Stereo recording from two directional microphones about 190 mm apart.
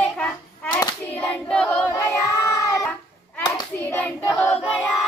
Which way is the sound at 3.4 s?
15° left (ahead or behind).